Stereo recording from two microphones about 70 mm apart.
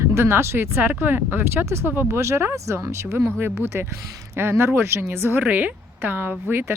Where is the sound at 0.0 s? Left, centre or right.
Right.